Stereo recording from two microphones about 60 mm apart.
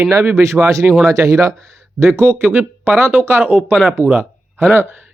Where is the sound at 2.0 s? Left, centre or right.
Right.